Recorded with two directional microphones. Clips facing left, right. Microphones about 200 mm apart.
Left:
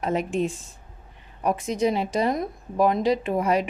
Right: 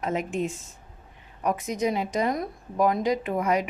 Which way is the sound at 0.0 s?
35° left (ahead or behind).